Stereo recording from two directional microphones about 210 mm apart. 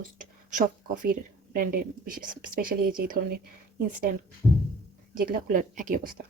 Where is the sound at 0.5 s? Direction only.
40° right (ahead or behind).